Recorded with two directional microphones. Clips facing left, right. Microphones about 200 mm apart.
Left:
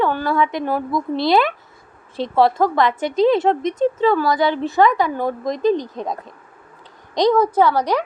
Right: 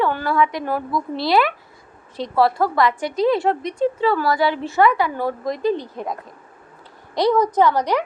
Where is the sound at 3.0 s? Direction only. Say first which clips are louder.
Left 3 dB; 25° left (ahead or behind).